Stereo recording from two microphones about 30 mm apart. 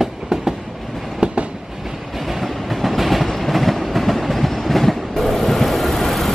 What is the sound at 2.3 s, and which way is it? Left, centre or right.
Train, centre.